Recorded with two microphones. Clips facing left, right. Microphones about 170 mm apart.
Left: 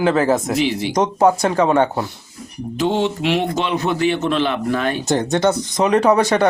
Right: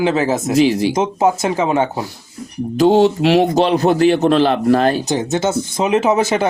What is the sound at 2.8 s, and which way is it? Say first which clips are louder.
A man's voice: right 7 dB; 40° right (ahead or behind).